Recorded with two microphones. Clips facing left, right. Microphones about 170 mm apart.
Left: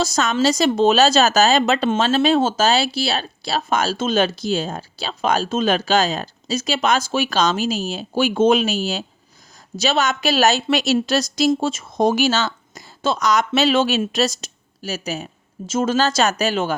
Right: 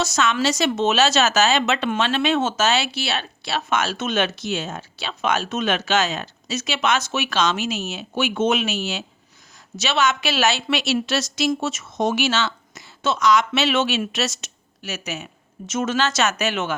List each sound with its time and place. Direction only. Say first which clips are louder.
0.0 s a woman's voice: left 3 dB; 35° left (ahead or behind)